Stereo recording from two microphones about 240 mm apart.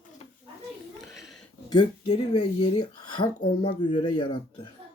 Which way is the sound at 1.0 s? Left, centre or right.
Centre.